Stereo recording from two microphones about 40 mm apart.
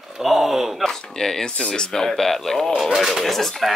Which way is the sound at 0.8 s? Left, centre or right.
Centre.